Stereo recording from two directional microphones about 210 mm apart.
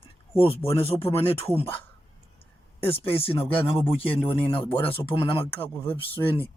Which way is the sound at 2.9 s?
25° left (ahead or behind).